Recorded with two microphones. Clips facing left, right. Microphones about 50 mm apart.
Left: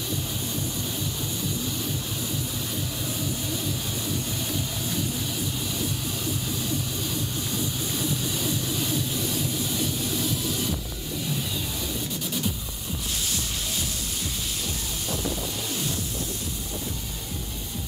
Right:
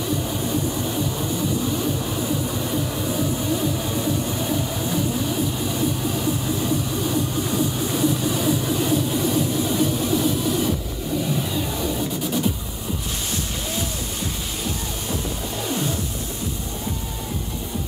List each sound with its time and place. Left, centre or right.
0.3 s vehicle: right
2.4 s music: right